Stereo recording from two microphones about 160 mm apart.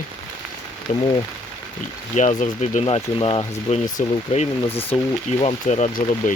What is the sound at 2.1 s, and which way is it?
Speech, 50° left (ahead or behind).